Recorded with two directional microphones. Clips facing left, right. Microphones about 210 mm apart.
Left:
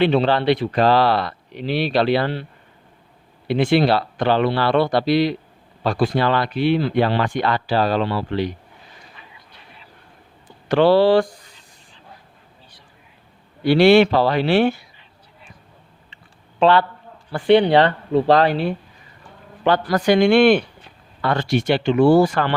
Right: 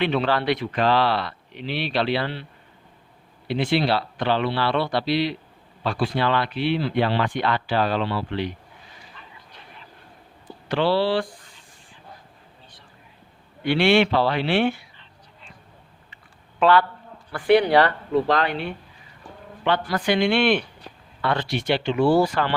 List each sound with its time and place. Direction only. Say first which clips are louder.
0.0 s speech: left 5 dB; 30° left (ahead or behind)
10.7 s speech: left 7 dB; 50° left (ahead or behind)
13.6 s speech: left 6 dB; 40° left (ahead or behind)
16.6 s a man's voice: left 2 dB; 25° left (ahead or behind); by 22.5 s 50° left (ahead or behind)